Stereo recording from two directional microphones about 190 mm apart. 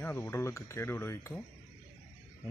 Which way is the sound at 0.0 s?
10° left (ahead or behind).